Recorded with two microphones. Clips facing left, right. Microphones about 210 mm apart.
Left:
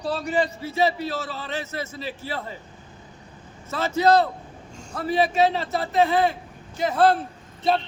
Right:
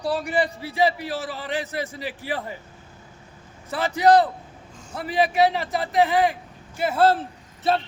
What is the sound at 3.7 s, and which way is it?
A man's voice, 15° right (ahead or behind).